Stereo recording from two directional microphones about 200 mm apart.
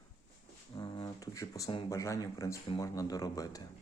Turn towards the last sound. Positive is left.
turn(degrees=20)  # may be behind; listen again after turning